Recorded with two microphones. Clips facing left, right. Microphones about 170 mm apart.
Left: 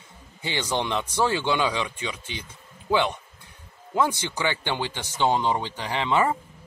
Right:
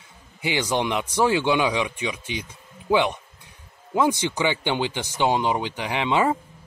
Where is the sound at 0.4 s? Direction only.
15° right (ahead or behind).